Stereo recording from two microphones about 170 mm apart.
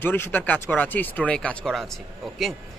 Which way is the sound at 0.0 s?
10° left (ahead or behind).